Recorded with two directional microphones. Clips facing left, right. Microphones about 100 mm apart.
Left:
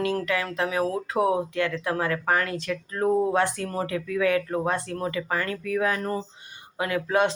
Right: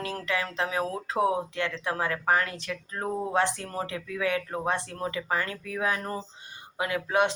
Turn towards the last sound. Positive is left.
turn(degrees=-15)  # may be behind; listen again after turning